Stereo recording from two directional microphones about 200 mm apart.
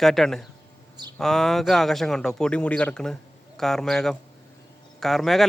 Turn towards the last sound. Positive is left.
turn(degrees=0)  # may be behind; listen again after turning